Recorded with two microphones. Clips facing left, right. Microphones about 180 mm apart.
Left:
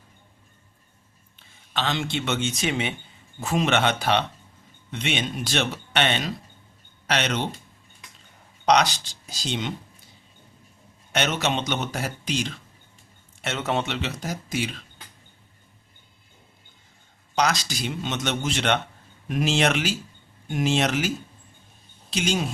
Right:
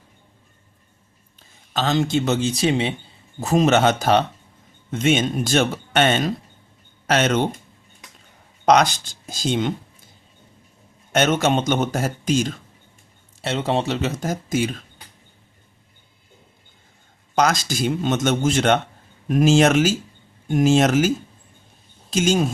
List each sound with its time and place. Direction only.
1.4 s speech: 40° right (ahead or behind)
8.6 s speech: 50° right (ahead or behind)
11.1 s speech: 50° right (ahead or behind)
13.4 s speech: 30° right (ahead or behind); by 14.8 s 45° right (ahead or behind)
17.3 s speech: 50° right (ahead or behind)
22.1 s speech: 45° right (ahead or behind)